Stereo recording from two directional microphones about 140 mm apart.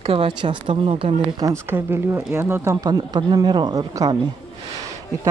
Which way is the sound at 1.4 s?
20° right (ahead or behind).